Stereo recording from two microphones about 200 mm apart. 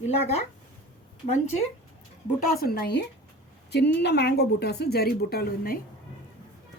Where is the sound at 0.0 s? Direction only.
30° left (ahead or behind).